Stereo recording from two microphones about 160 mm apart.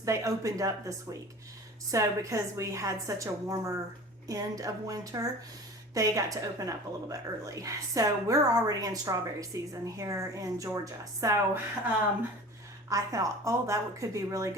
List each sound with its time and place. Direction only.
0.0 s speech: 20° right (ahead or behind)
12.9 s speech: 20° right (ahead or behind)